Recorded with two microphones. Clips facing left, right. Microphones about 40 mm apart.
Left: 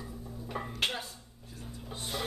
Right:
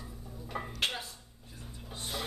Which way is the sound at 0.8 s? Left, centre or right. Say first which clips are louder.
Left 1 dB; centre.